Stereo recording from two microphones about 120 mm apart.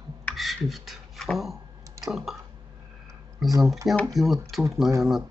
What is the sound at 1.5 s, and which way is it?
Clicking, 25° right (ahead or behind).